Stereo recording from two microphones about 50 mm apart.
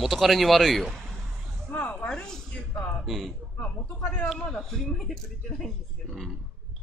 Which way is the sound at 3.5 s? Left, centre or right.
Left.